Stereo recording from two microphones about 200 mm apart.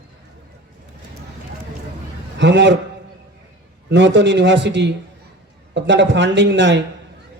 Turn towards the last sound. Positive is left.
turn(degrees=-65)  # may be behind; listen again after turning